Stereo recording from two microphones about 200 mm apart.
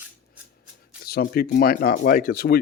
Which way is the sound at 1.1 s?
50° left (ahead or behind).